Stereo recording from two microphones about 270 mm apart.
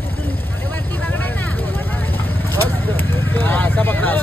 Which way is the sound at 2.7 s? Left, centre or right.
Centre.